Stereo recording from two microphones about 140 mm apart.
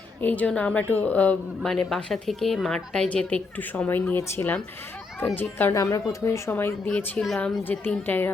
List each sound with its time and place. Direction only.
0.2 s a woman's voice: 10° left (ahead or behind)
6.8 s a woman's voice: 5° left (ahead or behind)